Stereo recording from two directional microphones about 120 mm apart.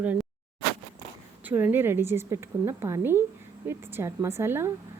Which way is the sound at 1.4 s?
15° right (ahead or behind).